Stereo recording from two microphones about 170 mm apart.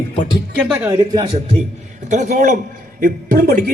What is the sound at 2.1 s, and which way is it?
A man's voice, 45° right (ahead or behind).